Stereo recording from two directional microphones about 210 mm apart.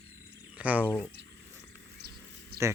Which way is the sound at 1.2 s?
55° right (ahead or behind).